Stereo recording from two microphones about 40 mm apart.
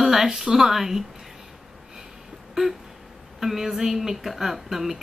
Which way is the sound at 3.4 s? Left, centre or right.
Centre.